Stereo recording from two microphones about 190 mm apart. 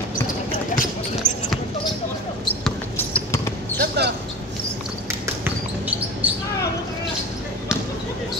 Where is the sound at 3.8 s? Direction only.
60° right (ahead or behind).